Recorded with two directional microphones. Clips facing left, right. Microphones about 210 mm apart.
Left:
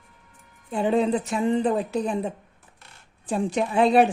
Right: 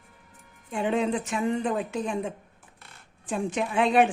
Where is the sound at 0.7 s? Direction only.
35° left (ahead or behind).